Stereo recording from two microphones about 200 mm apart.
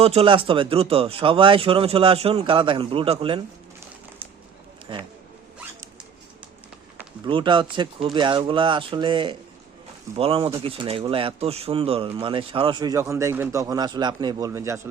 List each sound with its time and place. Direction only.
0.0 s speech: 30° right (ahead or behind)
4.9 s speech: 25° right (ahead or behind)
7.3 s a man's voice: 25° right (ahead or behind)